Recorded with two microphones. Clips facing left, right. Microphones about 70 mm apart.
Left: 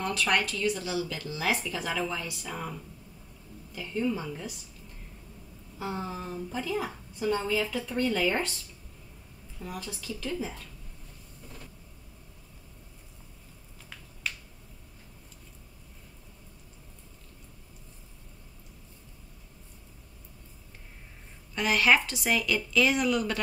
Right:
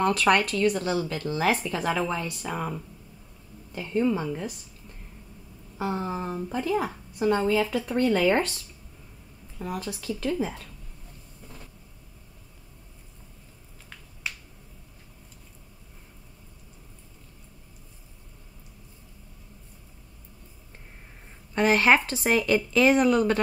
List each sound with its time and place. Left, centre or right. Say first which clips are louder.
0.0 s speech: right 6 dB; right
3.7 s a woman's voice: right 5 dB; right
5.8 s a woman's voice: right 5 dB; right
9.6 s speech: right 6 dB; right
21.5 s a woman's voice: right 4 dB; right